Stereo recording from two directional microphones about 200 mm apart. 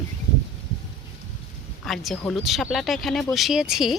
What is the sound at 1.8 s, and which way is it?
Speech, centre (ahead or behind).